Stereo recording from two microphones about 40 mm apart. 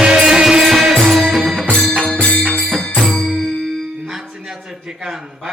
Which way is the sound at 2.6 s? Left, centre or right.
Centre.